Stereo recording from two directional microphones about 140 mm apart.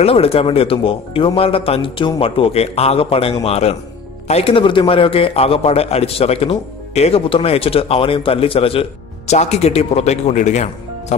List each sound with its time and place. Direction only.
0.0 s a man's voice: 45° left (ahead or behind)